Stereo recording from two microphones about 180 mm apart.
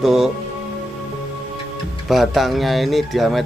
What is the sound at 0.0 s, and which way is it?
Speech, centre (ahead or behind).